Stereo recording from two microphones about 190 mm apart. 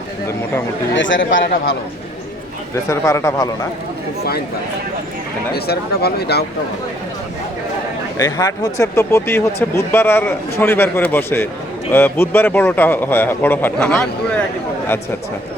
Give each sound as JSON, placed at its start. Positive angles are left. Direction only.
{"t": 0.9, "sound": "a man's voice", "side_deg": 75}
{"t": 2.9, "sound": "speech", "side_deg": 15}
{"t": 5.5, "sound": "speech", "side_deg": 55}
{"t": 8.2, "sound": "speech", "side_deg": 20}